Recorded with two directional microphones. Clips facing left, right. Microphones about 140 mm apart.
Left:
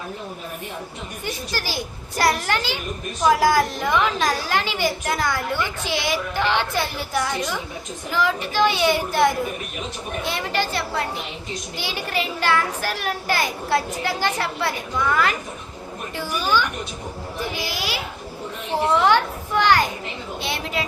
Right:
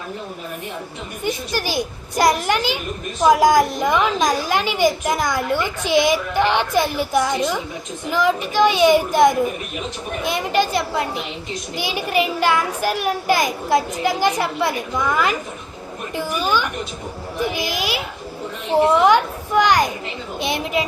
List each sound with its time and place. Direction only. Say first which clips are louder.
1.2 s a child's voice: right 6 dB; 15° right (ahead or behind)